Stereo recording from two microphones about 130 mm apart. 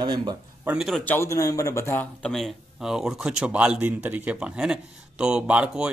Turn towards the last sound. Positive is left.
turn(degrees=-5)  # may be behind; listen again after turning